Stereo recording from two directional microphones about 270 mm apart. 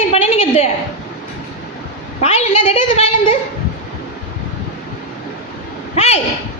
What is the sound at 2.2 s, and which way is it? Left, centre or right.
A woman's voice, left.